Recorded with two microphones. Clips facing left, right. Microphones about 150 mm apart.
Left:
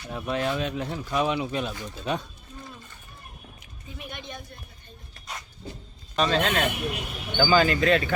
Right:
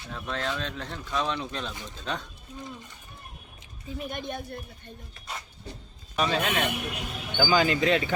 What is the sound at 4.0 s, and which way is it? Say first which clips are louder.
Speech: right 5 dB; 45° right (ahead or behind).